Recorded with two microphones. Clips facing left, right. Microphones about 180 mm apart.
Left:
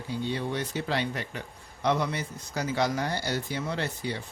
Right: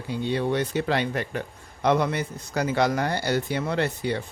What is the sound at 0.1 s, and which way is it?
Speech, 60° right (ahead or behind).